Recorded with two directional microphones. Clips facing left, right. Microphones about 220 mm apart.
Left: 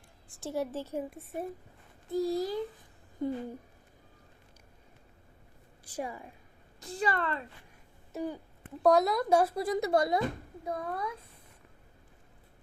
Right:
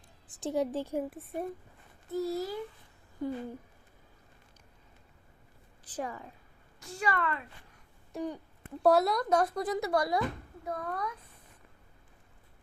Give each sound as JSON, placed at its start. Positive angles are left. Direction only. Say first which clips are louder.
{"t": 0.3, "sound": "a woman's voice", "louder": "right 3 dB", "side_deg": -20}
{"t": 1.2, "sound": "a woman's voice", "louder": "right 1 dB", "side_deg": 0}
{"t": 2.1, "sound": "speech", "louder": "left 3 dB", "side_deg": 15}
{"t": 5.8, "sound": "a woman's voice", "louder": "even", "side_deg": 10}
{"t": 6.8, "sound": "a woman's voice", "louder": "left 1 dB", "side_deg": 35}
{"t": 8.1, "sound": "speech", "louder": "even", "side_deg": 5}
{"t": 8.8, "sound": "a woman's voice", "louder": "even", "side_deg": -5}
{"t": 9.8, "sound": "speech", "louder": "left 3 dB", "side_deg": 25}
{"t": 10.7, "sound": "speech", "louder": "left 1 dB", "side_deg": 10}